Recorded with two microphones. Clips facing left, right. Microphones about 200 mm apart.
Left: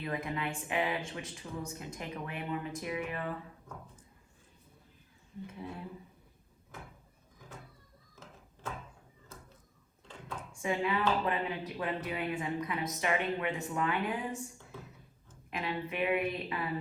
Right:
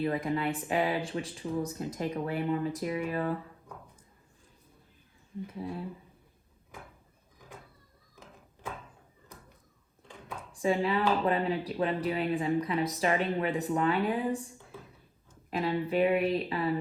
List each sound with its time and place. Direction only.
0.0 s speech: 30° right (ahead or behind)
5.6 s speech: 30° right (ahead or behind)
8.1 s a sound: 15° right (ahead or behind)
10.5 s speech: 30° right (ahead or behind)
15.4 s speech: 35° right (ahead or behind)